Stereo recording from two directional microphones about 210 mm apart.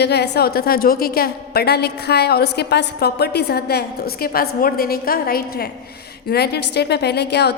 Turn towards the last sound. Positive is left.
turn(degrees=50)  # may be behind; listen again after turning